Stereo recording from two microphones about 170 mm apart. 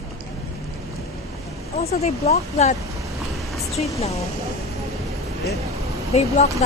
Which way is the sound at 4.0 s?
35° left (ahead or behind).